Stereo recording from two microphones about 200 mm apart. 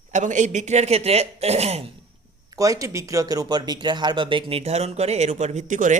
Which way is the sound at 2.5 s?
15° right (ahead or behind).